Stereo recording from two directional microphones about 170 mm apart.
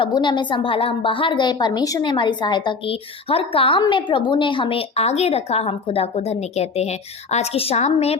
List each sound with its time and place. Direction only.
0.0 s a woman's voice: 25° left (ahead or behind)